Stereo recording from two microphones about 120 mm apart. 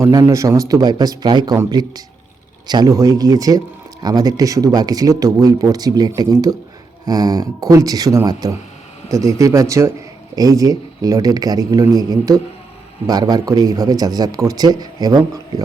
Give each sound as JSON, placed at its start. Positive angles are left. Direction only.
{"t": 0.0, "sound": "speech", "side_deg": -25}